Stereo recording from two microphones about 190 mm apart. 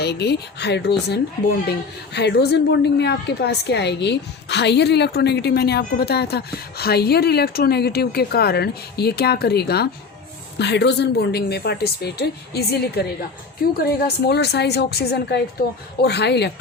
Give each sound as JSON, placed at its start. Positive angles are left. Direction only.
{"t": 0.0, "sound": "a woman's voice", "side_deg": 60}